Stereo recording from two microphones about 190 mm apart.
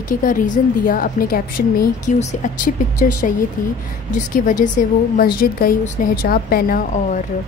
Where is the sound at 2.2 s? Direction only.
35° left (ahead or behind).